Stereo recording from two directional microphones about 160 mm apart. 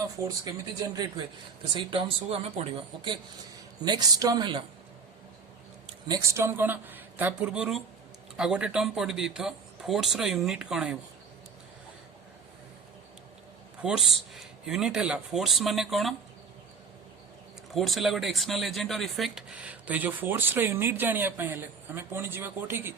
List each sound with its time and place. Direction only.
0.3 s speech: 25° right (ahead or behind)
3.8 s speech: 25° right (ahead or behind)
6.1 s speech: 20° right (ahead or behind)
13.8 s speech: centre (ahead or behind)
17.7 s speech: centre (ahead or behind)